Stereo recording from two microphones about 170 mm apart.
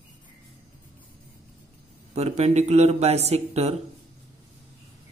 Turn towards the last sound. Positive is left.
turn(degrees=-40)  # may be behind; listen again after turning